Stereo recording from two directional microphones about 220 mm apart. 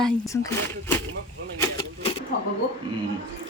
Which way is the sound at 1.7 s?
25° left (ahead or behind).